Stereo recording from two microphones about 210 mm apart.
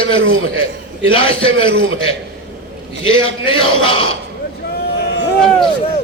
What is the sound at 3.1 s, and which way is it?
Speech, 25° left (ahead or behind).